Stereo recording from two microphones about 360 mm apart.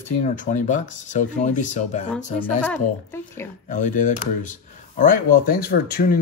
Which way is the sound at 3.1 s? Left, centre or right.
Centre.